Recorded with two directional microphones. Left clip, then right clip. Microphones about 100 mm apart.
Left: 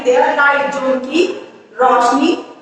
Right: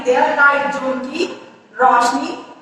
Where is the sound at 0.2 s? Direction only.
30° left (ahead or behind).